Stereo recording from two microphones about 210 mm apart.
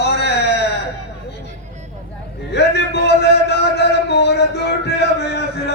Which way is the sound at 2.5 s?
55° left (ahead or behind).